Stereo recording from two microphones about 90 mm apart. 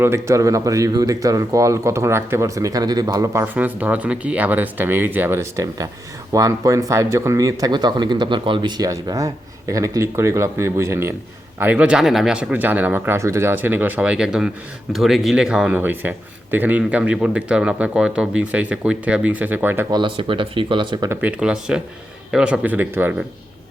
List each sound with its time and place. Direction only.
0.0 s speech: 30° right (ahead or behind)
3.4 s speech: 20° right (ahead or behind); by 8.7 s 65° right (ahead or behind)
8.8 s speech: 40° right (ahead or behind)
11.6 s speech: 15° right (ahead or behind)
11.9 s speech: 5° right (ahead or behind); by 13.1 s 20° right (ahead or behind)
13.1 s speech: 30° right (ahead or behind); by 15.8 s 10° right (ahead or behind)
15.8 s speech: 20° right (ahead or behind)
19.9 s speech: 65° right (ahead or behind)
21.2 s speech: 15° right (ahead or behind)
22.6 s speech: 20° right (ahead or behind)